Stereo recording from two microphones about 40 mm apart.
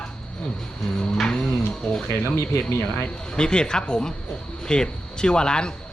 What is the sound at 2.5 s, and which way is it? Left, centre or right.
Speech, left.